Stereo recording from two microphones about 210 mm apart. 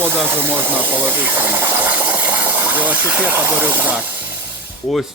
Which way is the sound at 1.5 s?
10° right (ahead or behind).